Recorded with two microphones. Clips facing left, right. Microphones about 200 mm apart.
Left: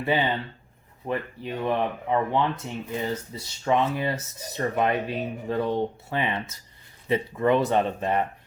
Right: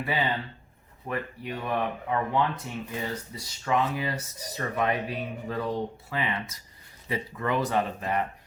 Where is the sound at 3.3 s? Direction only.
25° left (ahead or behind).